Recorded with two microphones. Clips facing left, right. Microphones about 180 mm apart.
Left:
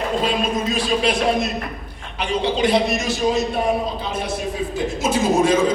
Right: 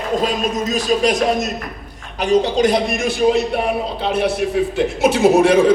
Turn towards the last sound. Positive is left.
turn(degrees=-70)  # may be behind; listen again after turning